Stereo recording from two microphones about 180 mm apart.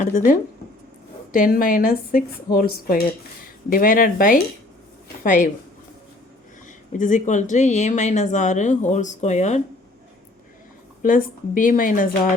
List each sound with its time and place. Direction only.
0.0 s a woman's voice: 45° left (ahead or behind)
6.9 s speech: 45° left (ahead or behind)
11.0 s a woman's voice: 50° left (ahead or behind)